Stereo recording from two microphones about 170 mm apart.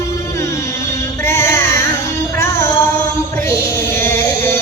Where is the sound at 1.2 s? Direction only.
15° left (ahead or behind).